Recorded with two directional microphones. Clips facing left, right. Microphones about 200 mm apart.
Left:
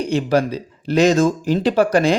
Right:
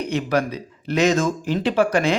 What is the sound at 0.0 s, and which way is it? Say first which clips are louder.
Speech: left 4 dB; 30° left (ahead or behind).